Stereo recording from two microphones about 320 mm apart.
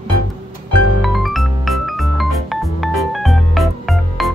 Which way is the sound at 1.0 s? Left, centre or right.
Centre.